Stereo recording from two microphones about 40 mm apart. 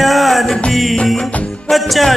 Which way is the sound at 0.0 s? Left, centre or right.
Centre.